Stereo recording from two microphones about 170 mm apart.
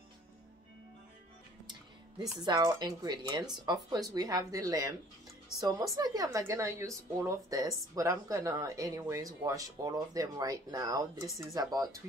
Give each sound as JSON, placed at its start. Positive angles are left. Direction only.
{"t": 2.3, "sound": "a woman's voice", "side_deg": -25}